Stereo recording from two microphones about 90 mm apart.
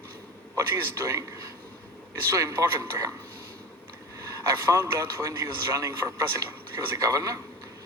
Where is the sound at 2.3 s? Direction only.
40° right (ahead or behind).